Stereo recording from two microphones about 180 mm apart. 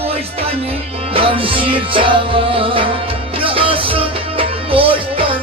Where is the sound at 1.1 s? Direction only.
30° right (ahead or behind).